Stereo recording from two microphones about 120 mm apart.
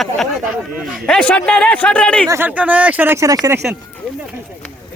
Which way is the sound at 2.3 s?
15° right (ahead or behind).